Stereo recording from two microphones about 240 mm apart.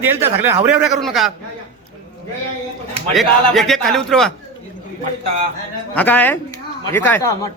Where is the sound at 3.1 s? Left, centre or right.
Centre.